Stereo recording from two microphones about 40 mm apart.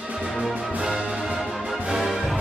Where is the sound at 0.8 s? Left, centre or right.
Centre.